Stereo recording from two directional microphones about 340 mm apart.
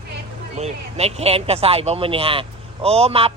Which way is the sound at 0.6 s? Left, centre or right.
Centre.